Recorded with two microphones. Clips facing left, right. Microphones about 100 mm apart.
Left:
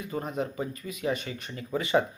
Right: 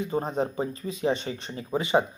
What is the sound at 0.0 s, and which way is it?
Speech, 30° right (ahead or behind).